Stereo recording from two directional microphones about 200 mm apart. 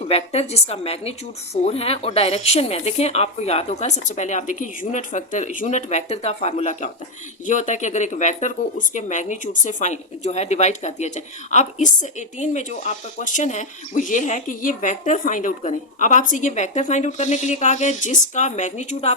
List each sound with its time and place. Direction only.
0.0 s speech: 30° left (ahead or behind)